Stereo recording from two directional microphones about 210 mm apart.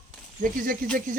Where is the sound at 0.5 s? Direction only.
40° right (ahead or behind).